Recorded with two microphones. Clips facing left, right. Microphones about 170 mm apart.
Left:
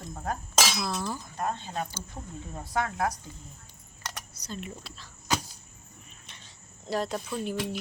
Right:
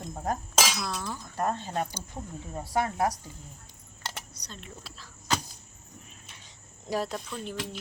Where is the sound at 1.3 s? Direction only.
40° right (ahead or behind).